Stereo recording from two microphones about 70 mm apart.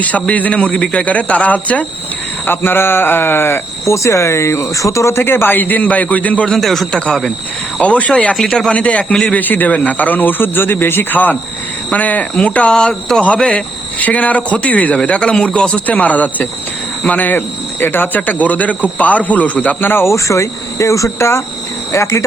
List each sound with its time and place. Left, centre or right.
0.0 s speech: left
3.9 s speech: left
6.5 s a man's voice: centre
7.8 s speech: centre
8.7 s speech: centre; by 22.2 s left